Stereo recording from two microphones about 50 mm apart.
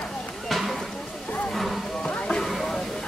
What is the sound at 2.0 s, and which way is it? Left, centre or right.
Music, left.